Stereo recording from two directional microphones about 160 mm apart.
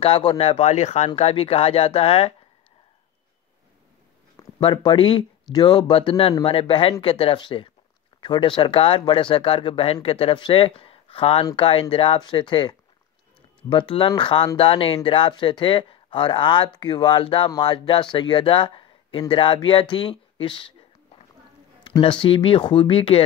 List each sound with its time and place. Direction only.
0.0 s speech: 35° left (ahead or behind)
4.6 s speech: 30° left (ahead or behind)
21.8 s a sound: 35° left (ahead or behind)
22.2 s speech: 35° left (ahead or behind)